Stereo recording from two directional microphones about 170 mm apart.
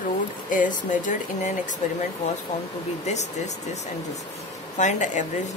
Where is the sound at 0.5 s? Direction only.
50° left (ahead or behind).